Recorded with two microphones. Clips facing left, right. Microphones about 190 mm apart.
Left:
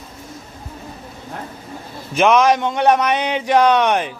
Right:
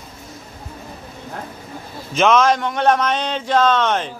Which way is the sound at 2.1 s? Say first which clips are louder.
Left 1 dB; 15° left (ahead or behind).